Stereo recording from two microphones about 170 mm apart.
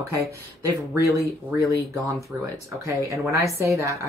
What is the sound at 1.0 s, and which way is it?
Speech, 20° left (ahead or behind).